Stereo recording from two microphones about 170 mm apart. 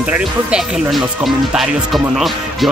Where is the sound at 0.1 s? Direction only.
5° right (ahead or behind).